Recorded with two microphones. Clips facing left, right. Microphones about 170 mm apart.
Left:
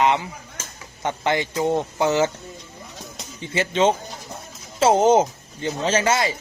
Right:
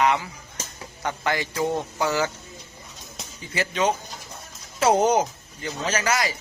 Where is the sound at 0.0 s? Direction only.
20° left (ahead or behind).